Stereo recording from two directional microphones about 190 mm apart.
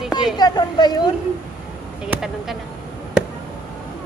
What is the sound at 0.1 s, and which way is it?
Speech, 20° left (ahead or behind).